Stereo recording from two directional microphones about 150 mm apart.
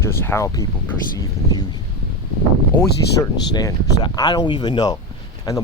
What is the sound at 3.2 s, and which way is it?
Speech, 25° left (ahead or behind).